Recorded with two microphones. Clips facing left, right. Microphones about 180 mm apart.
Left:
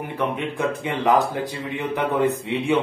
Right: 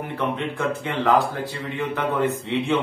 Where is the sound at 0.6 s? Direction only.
15° left (ahead or behind).